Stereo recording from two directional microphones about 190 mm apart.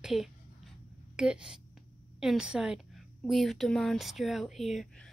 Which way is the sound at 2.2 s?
5° right (ahead or behind).